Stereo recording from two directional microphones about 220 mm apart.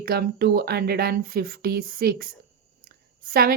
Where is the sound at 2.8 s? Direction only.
40° right (ahead or behind).